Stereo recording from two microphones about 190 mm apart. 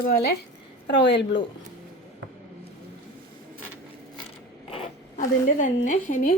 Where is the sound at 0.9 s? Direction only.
70° left (ahead or behind).